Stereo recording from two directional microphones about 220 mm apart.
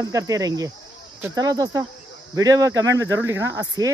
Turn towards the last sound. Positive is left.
turn(degrees=-15)  # may be behind; listen again after turning